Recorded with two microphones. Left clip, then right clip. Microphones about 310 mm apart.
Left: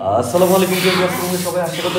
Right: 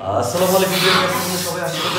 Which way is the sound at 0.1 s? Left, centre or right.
Left.